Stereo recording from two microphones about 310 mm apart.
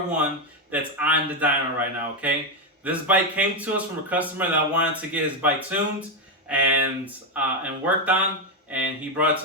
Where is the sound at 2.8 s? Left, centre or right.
Centre.